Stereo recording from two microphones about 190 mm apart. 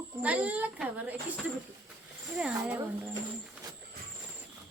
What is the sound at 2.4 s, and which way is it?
Speech, 5° right (ahead or behind).